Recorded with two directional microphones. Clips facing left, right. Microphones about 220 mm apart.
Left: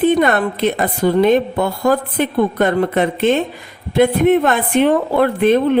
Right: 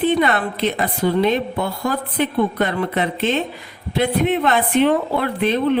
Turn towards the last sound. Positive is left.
turn(degrees=50)  # may be behind; listen again after turning